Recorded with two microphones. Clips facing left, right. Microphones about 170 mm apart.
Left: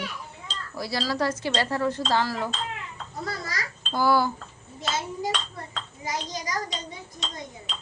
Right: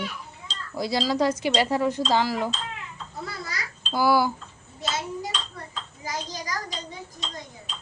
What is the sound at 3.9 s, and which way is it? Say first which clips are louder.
Speech: right 1 dB; 10° right (ahead or behind).